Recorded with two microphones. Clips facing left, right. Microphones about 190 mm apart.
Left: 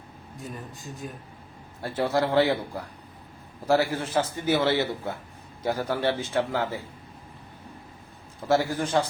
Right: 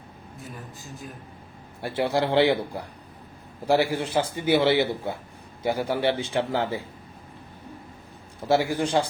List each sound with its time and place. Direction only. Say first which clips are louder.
0.3 s a man's voice: left 3 dB; centre (ahead or behind)
1.8 s a man's voice: right 1 dB; 20° right (ahead or behind)
8.4 s a man's voice: right 1 dB; 10° right (ahead or behind)